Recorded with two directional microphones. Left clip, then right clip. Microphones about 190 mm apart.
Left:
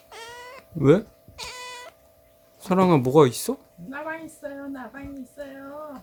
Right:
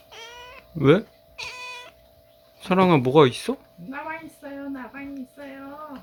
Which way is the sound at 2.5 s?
5° left (ahead or behind).